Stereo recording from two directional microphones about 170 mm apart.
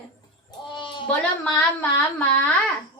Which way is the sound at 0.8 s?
30° left (ahead or behind).